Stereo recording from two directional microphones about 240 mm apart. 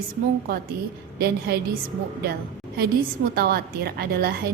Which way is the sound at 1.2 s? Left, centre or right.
Right.